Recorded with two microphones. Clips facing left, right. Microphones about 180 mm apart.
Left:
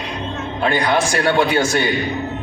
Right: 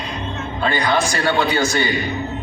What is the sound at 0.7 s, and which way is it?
Speech, 25° left (ahead or behind).